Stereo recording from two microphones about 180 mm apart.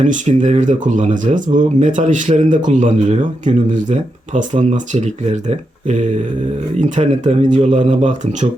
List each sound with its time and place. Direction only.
0.0 s speech: 45° right (ahead or behind)